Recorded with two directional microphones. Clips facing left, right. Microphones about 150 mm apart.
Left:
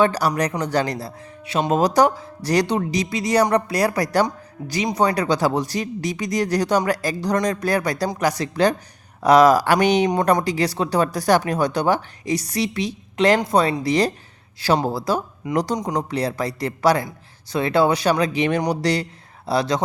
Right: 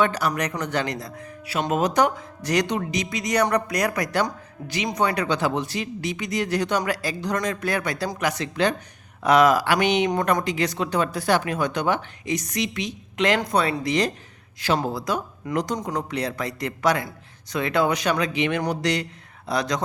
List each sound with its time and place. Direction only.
0.0 s speech: 35° left (ahead or behind)